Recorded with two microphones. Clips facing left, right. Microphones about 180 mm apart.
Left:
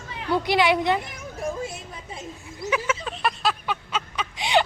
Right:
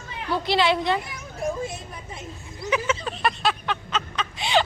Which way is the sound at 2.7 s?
5° left (ahead or behind).